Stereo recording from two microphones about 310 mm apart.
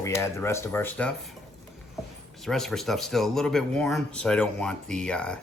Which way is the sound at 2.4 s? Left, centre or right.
Centre.